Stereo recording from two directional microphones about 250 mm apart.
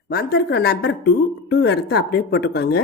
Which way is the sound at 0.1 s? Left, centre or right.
Left.